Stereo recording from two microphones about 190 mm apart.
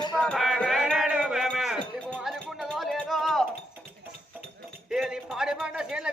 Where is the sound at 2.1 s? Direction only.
Centre (ahead or behind).